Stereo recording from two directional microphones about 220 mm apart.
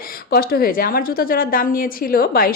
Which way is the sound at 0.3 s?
45° left (ahead or behind).